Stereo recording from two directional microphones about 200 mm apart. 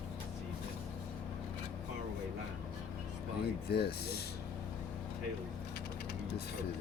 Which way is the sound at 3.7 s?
50° left (ahead or behind).